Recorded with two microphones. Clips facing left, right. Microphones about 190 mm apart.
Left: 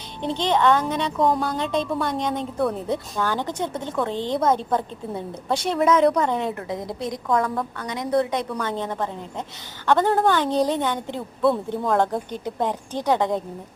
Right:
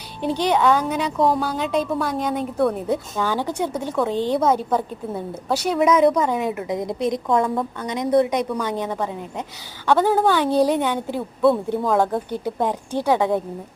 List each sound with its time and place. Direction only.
0.2 s a woman's voice: 10° right (ahead or behind)